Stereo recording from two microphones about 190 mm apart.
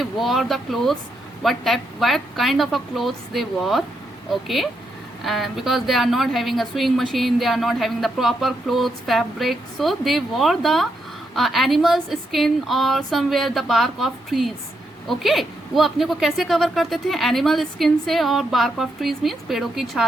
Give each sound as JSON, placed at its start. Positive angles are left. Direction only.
{"t": 0.0, "sound": "a woman's voice", "side_deg": 0}